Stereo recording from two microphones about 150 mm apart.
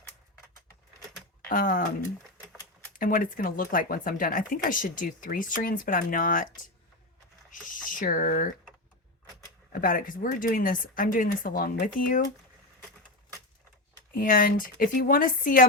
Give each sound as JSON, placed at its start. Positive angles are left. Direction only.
{"t": 1.5, "sound": "speech", "side_deg": 65}
{"t": 2.9, "sound": "speech", "side_deg": 65}
{"t": 7.5, "sound": "a sound", "side_deg": 60}
{"t": 9.7, "sound": "speech", "side_deg": 65}
{"t": 14.1, "sound": "speech", "side_deg": 70}